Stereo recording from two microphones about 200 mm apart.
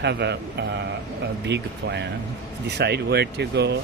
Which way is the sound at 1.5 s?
60° right (ahead or behind).